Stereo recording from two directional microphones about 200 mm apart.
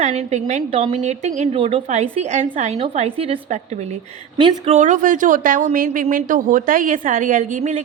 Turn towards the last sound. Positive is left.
turn(degrees=-35)  # may be behind; listen again after turning